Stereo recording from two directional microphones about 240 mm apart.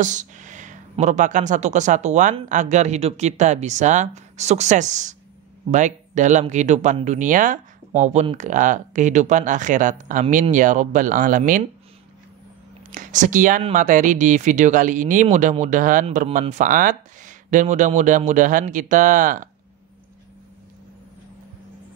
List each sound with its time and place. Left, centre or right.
0.0 s speech: right
12.9 s speech: right